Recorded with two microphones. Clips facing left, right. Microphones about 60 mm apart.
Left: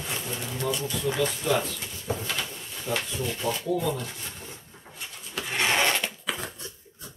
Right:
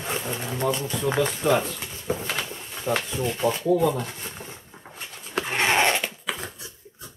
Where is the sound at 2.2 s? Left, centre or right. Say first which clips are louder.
Right 2 dB; right.